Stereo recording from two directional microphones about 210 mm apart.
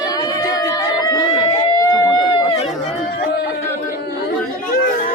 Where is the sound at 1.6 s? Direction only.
15° left (ahead or behind).